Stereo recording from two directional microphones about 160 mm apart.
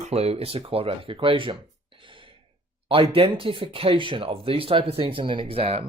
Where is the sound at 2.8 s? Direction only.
35° right (ahead or behind).